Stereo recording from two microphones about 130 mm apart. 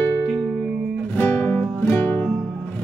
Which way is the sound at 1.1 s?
10° left (ahead or behind).